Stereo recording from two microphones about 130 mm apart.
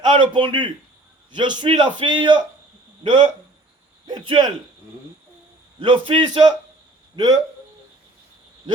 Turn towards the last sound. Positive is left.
turn(degrees=-30)  # may be behind; listen again after turning